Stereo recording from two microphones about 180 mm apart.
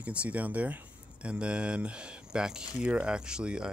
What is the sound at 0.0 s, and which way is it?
Speech, 5° right (ahead or behind).